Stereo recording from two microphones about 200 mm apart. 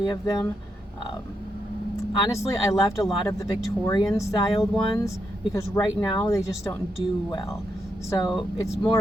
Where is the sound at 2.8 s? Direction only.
15° left (ahead or behind).